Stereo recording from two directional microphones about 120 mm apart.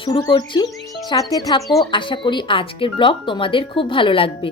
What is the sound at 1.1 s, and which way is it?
Speech, 30° left (ahead or behind).